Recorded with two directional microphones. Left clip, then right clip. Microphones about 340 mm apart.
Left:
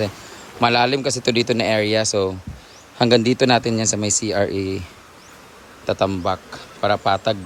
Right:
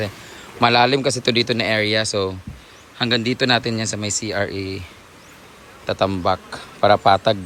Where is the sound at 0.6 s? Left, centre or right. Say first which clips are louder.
Right 2 dB; centre.